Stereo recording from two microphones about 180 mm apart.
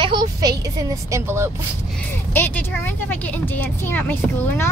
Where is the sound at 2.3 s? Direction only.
10° left (ahead or behind).